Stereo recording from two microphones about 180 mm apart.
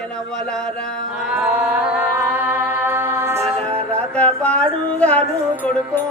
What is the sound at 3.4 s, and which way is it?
Music, 35° right (ahead or behind).